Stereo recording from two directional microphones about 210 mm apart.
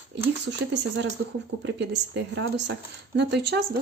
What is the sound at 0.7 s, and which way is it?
A woman's voice, 55° right (ahead or behind).